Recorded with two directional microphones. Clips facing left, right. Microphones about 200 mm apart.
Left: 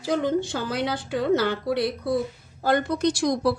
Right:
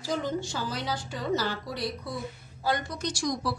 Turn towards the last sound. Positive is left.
turn(degrees=60)  # may be behind; listen again after turning